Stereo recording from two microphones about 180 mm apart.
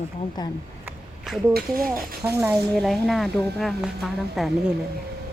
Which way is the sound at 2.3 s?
10° right (ahead or behind).